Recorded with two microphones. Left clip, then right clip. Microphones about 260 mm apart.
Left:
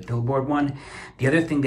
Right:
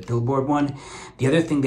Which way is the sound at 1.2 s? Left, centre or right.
Centre.